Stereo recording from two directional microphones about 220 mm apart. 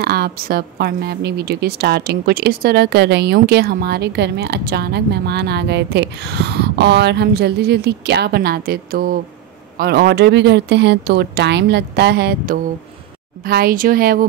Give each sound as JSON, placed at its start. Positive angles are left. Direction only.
{"t": 0.0, "sound": "a woman's voice", "side_deg": -45}